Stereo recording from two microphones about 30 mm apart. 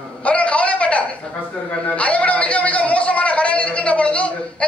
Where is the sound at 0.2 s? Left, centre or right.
Left.